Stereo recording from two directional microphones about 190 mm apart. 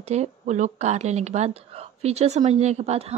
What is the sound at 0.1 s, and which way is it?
A woman's voice, 35° right (ahead or behind).